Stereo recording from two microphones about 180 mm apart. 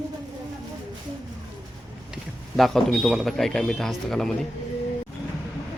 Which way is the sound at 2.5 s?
Centre (ahead or behind).